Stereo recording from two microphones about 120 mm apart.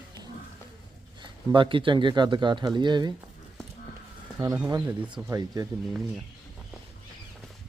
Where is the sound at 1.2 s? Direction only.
45° right (ahead or behind).